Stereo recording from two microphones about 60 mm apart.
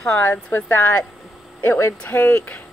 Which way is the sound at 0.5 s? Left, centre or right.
Left.